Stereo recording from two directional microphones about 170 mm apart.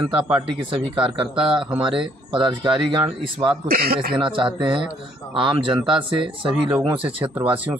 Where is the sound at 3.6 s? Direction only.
60° right (ahead or behind).